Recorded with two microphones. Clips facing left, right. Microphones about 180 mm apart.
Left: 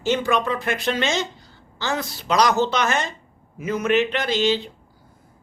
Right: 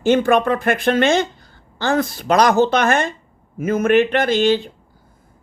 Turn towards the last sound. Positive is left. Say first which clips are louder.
# right 5 dB
turn(degrees=-50)  # may be behind; listen again after turning